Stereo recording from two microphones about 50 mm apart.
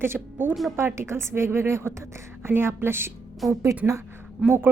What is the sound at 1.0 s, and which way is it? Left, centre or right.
A woman's voice, right.